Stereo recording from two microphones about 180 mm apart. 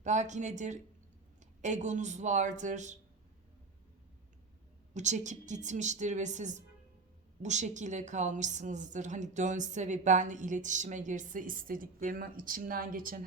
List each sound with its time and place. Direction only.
0.0 s a woman's voice: 40° right (ahead or behind)
4.9 s a woman's voice: 40° right (ahead or behind)